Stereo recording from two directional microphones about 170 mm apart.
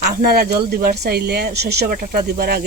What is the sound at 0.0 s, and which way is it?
Speech, 65° right (ahead or behind).